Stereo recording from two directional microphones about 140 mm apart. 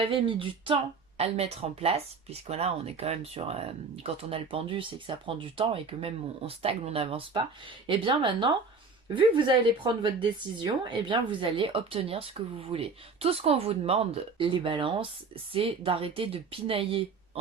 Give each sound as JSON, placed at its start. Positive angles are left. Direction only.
{"t": 0.0, "sound": "speech", "side_deg": -40}
{"t": 9.8, "sound": "speech", "side_deg": -35}